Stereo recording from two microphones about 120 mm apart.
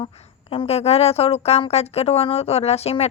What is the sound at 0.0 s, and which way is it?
A woman's voice, 60° left (ahead or behind).